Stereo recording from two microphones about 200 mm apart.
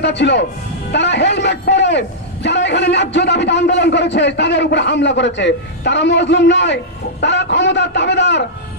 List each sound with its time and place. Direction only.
0.0 s a man's voice: 60° left (ahead or behind)